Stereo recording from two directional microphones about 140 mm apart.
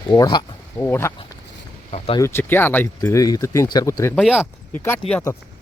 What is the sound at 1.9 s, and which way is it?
Speech, 45° left (ahead or behind).